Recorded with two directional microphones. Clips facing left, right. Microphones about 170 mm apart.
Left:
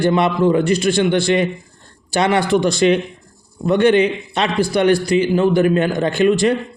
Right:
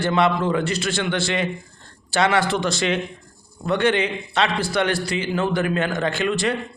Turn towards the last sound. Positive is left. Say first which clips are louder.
# left 7 dB
turn(degrees=15)  # may be behind; listen again after turning